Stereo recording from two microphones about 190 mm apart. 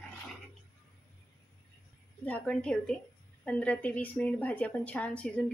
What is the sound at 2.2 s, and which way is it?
A woman's voice, 5° left (ahead or behind).